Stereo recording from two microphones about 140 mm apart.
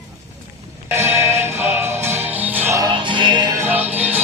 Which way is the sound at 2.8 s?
35° right (ahead or behind).